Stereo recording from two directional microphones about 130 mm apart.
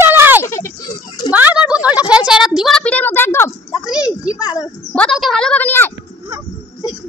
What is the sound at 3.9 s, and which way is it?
Speech, 30° left (ahead or behind).